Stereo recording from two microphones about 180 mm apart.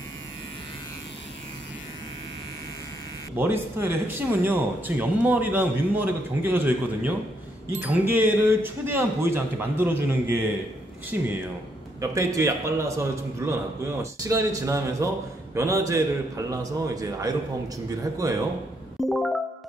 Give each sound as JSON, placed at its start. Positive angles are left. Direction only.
{"t": 3.3, "sound": "speech", "side_deg": -10}
{"t": 11.1, "sound": "speech", "side_deg": -10}
{"t": 18.9, "sound": "music", "side_deg": 0}